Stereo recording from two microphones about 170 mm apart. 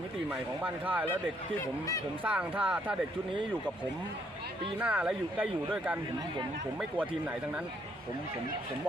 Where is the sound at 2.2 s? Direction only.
10° right (ahead or behind).